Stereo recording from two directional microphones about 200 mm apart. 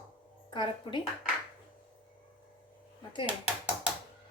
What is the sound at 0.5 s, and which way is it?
Speech, 25° left (ahead or behind).